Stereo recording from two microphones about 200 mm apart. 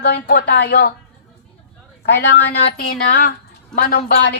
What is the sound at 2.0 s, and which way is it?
Speech, 60° left (ahead or behind).